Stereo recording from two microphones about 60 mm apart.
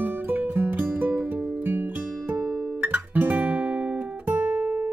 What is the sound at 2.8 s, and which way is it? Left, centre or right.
Guitar, right.